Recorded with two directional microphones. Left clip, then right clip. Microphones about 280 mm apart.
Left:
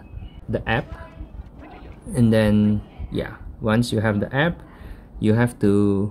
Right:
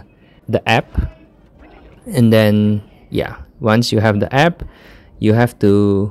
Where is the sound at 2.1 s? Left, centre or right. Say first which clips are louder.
Right 7 dB; right.